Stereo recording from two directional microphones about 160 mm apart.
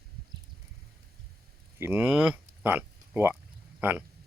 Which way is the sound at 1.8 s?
10° right (ahead or behind).